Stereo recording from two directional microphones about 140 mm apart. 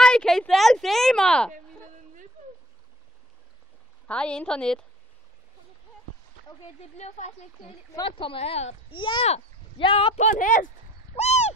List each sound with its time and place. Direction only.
0.0 s a sound: 5° left (ahead or behind)
4.1 s a woman's voice: 5° left (ahead or behind)
6.8 s speech: 50° left (ahead or behind)
8.0 s speech: 40° left (ahead or behind)
8.9 s speech: 35° left (ahead or behind)
10.1 s speech: 65° left (ahead or behind)
11.1 s a sound: 50° left (ahead or behind)